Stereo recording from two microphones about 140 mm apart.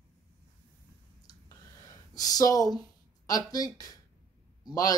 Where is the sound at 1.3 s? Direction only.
30° left (ahead or behind).